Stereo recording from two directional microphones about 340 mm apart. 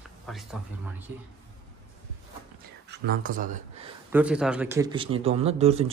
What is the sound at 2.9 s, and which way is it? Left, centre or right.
Speech, right.